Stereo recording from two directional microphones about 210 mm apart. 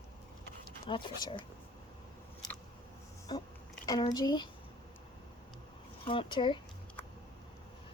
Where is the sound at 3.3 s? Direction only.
20° left (ahead or behind).